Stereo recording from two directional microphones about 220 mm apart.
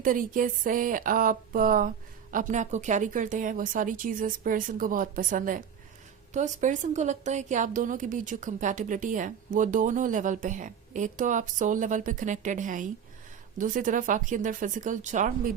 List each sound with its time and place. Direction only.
0.0 s a woman's voice: 40° right (ahead or behind)